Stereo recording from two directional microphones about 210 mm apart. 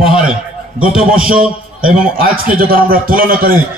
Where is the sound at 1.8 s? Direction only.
40° right (ahead or behind).